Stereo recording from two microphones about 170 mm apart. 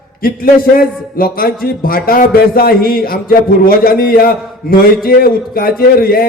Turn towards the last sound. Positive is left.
turn(degrees=60)  # may be behind; listen again after turning